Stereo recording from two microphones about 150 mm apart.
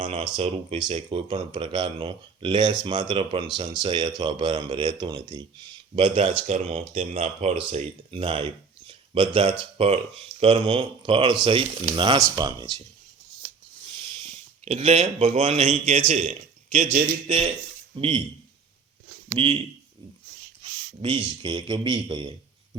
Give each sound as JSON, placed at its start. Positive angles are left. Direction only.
{"t": 0.1, "sound": "speech", "side_deg": -45}
{"t": 6.5, "sound": "a man's voice", "side_deg": -50}
{"t": 7.5, "sound": "speech", "side_deg": -40}
{"t": 14.6, "sound": "a man's voice", "side_deg": -45}
{"t": 17.2, "sound": "speech", "side_deg": -35}
{"t": 19.3, "sound": "a man's voice", "side_deg": -35}